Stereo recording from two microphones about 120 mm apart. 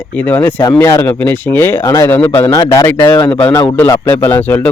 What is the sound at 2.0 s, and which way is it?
Speech, 15° left (ahead or behind).